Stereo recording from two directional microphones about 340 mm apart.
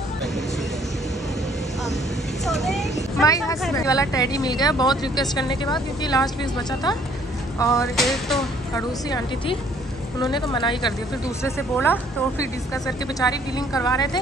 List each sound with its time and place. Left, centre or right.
2.6 s vehicle: centre
3.2 s speech: centre
7.5 s speech: centre
10.2 s speech: centre